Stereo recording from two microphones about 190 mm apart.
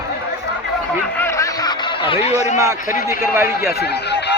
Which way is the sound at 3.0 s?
15° right (ahead or behind).